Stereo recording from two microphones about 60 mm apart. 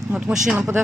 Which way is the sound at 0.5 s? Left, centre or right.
Right.